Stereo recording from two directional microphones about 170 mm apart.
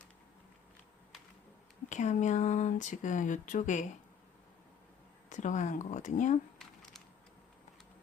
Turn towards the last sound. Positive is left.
turn(degrees=45)  # may be behind; listen again after turning